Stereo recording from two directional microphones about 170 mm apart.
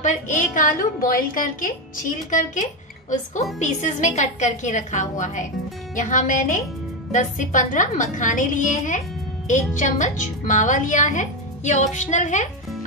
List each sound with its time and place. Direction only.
0.0 s a woman's voice: 45° left (ahead or behind)